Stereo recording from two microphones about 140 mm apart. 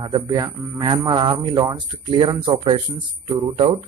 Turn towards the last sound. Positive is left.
turn(degrees=-35)  # may be behind; listen again after turning